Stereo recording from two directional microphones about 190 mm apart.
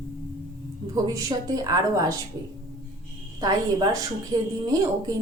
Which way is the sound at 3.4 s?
20° right (ahead or behind).